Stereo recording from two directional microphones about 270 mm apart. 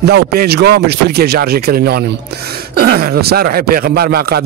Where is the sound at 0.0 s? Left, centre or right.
Right.